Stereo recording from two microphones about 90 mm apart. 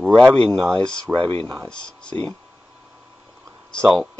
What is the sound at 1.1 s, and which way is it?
Speech, 85° right.